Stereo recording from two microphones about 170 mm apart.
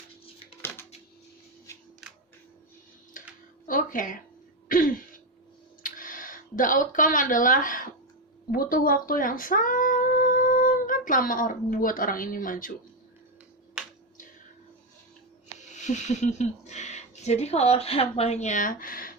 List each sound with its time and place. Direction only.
0.6 s a sound: 15° left (ahead or behind)
3.2 s a sound: 50° left (ahead or behind)
3.7 s speech: 55° left (ahead or behind)
4.7 s throat clearing: 55° left (ahead or behind)
5.8 s speech: 55° left (ahead or behind)
15.5 s speech: 45° left (ahead or behind)